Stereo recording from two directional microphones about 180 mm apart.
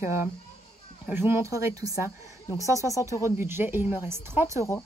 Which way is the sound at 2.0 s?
20° left (ahead or behind).